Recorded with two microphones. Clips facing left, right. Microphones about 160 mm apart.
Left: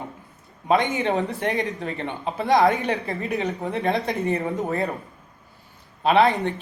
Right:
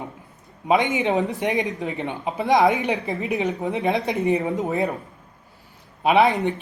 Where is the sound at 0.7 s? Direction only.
20° right (ahead or behind).